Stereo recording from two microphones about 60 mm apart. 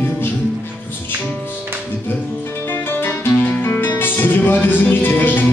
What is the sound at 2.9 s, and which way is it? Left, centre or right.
Music, left.